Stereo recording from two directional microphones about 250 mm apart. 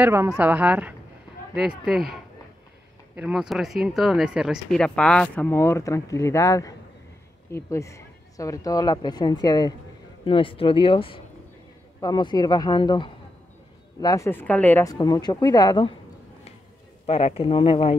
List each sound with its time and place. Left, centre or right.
0.0 s speech: centre
17.0 s speech: left